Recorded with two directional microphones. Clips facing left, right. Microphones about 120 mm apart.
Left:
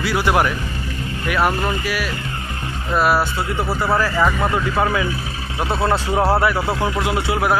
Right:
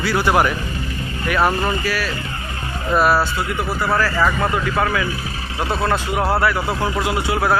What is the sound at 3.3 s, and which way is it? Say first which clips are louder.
Speech: left 1 dB; 25° left (ahead or behind).